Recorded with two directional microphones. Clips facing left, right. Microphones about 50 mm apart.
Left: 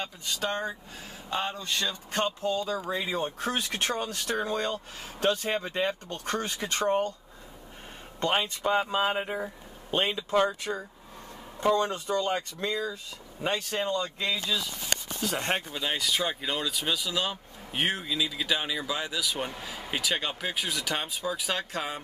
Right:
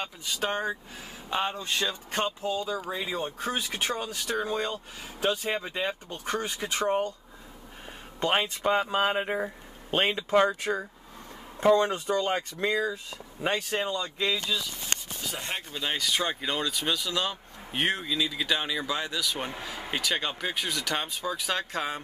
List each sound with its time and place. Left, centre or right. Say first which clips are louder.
0.4 s speech: right 2 dB; centre
2.4 s speech: left 1 dB; centre
2.8 s speech: left 2 dB; centre
8.2 s speech: right 1 dB; centre
8.9 s speech: right 2 dB; right
9.8 s speech: right 2 dB; right
10.3 s speech: right 3 dB; right
13.9 s speech: right 1 dB; centre
15.3 s speech: left 6 dB; left
15.7 s speech: even; centre